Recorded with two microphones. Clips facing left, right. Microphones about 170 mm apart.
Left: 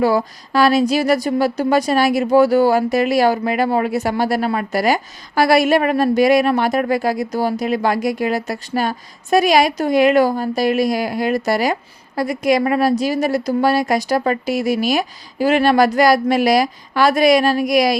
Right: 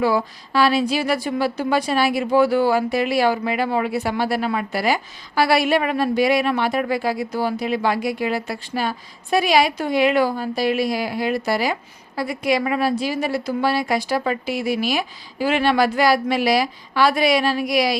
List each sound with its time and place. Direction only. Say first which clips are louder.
0.0 s a woman's voice: left 3 dB; 40° left (ahead or behind)